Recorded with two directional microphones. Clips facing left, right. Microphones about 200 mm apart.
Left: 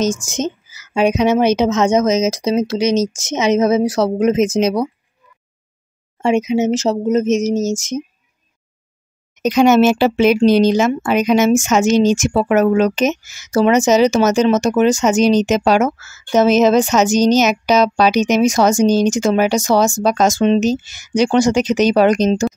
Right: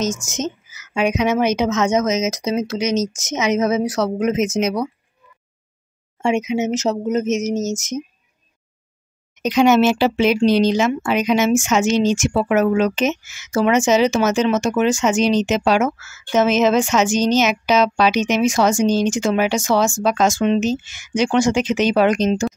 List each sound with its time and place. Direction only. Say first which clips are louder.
0.0 s speech: left 4 dB; 30° left (ahead or behind)
6.2 s speech: left 4 dB; 35° left (ahead or behind)
9.4 s speech: left 3 dB; 45° left (ahead or behind)